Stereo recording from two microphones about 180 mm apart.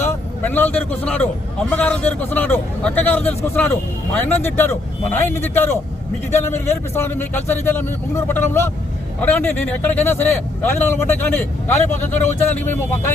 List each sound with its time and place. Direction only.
0.0 s vehicle: 10° left (ahead or behind)
1.7 s a man's voice: 10° left (ahead or behind)
12.1 s speech: 40° left (ahead or behind)
12.5 s a man's voice: 10° left (ahead or behind)